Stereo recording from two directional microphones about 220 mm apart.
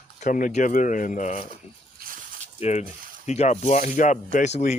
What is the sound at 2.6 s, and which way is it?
Speech, 30° left (ahead or behind).